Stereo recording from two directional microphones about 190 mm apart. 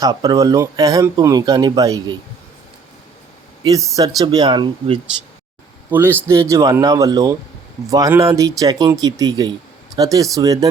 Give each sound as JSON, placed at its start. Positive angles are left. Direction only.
{"t": 0.0, "sound": "speech", "side_deg": -20}
{"t": 3.6, "sound": "speech", "side_deg": -20}
{"t": 5.9, "sound": "speech", "side_deg": -10}